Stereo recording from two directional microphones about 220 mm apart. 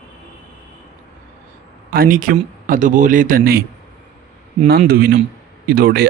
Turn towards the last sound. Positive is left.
turn(degrees=-45)  # may be behind; listen again after turning